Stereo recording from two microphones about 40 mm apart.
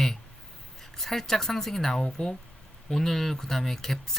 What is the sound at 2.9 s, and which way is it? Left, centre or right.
Speech, centre.